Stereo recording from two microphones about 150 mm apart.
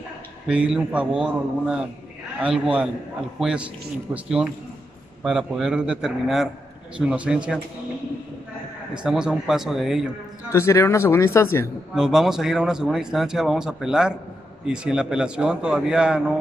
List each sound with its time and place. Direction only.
0.5 s a man's voice: 5° right (ahead or behind)
8.9 s speech: 5° right (ahead or behind)
10.5 s speech: 20° left (ahead or behind)
11.9 s speech: 5° right (ahead or behind)